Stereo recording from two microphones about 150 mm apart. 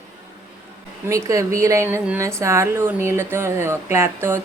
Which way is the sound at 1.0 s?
20° right (ahead or behind).